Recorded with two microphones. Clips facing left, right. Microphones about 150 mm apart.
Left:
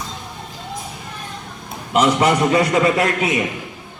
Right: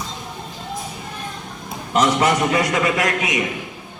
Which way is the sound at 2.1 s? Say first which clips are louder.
Left 2 dB; 25° left (ahead or behind).